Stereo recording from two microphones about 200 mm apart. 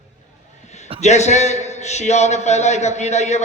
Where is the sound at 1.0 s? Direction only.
35° left (ahead or behind).